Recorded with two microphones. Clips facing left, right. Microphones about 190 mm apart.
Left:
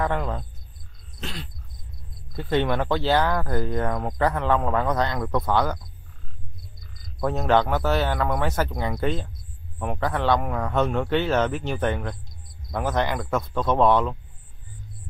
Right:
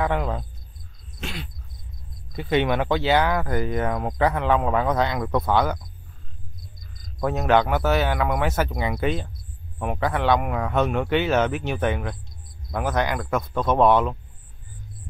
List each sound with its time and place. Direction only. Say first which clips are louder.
0.0 s speech: right 1 dB; 10° right (ahead or behind)
7.2 s speech: right 1 dB; 10° right (ahead or behind)
13.7 s speech: right 2 dB; 15° right (ahead or behind)